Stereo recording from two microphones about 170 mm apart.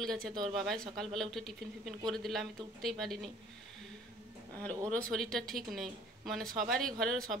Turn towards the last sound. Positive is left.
turn(degrees=0)  # may be behind; listen again after turning